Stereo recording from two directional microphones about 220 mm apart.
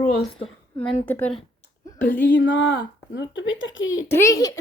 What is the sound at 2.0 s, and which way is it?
Speech, 55° left (ahead or behind).